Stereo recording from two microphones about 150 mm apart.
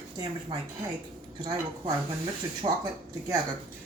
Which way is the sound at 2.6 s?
40° right (ahead or behind).